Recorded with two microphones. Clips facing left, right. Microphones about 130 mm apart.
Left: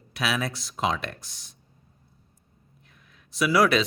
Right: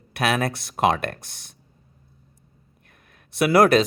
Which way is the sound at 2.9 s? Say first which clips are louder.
Right 4 dB; 55° right (ahead or behind).